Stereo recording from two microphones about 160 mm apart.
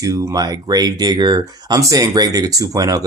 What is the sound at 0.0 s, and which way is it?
Speech, 20° right (ahead or behind).